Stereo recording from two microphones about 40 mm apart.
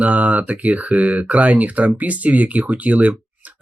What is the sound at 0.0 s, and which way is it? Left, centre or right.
Speech, right.